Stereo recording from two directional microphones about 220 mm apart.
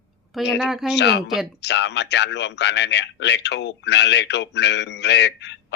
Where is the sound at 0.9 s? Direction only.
50° left (ahead or behind).